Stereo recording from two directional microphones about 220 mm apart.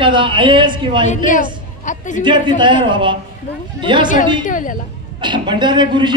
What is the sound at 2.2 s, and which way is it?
A man's voice, 20° right (ahead or behind).